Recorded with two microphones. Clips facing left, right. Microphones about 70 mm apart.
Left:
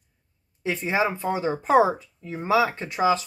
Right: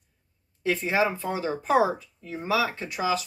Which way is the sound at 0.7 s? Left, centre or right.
Left.